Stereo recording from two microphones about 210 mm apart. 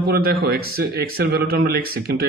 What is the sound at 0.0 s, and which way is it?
Speech, 45° right (ahead or behind).